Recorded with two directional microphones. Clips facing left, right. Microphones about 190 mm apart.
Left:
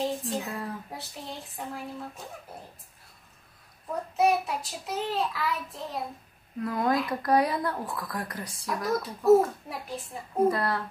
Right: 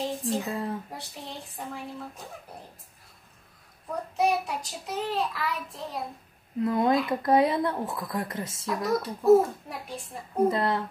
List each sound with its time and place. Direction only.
0.0 s child singing: centre (ahead or behind)
4.2 s child singing: centre (ahead or behind)
6.6 s a woman's voice: 25° right (ahead or behind)
6.9 s child singing: centre (ahead or behind)
7.2 s a woman's voice: 25° right (ahead or behind)
8.7 s child singing: centre (ahead or behind)
10.5 s a woman's voice: 20° right (ahead or behind)